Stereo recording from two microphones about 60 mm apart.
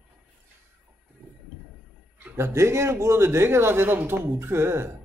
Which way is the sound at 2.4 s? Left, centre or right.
Right.